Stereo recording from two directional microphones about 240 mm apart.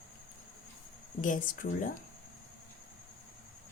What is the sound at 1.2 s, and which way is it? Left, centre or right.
Speech, left.